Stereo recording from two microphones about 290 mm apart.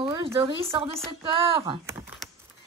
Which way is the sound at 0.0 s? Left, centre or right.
Centre.